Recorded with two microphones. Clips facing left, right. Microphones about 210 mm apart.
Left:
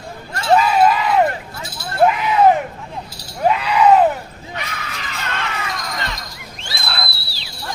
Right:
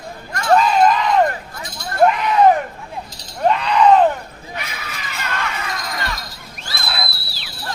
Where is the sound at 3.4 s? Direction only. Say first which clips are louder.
Even; 5° left (ahead or behind).